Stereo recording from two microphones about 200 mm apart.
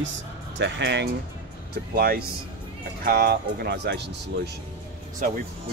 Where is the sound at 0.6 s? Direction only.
60° right (ahead or behind).